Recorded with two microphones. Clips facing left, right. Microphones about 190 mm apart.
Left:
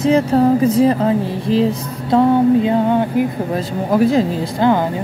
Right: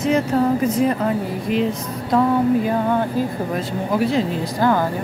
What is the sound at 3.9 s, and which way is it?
Speech, 45° left (ahead or behind).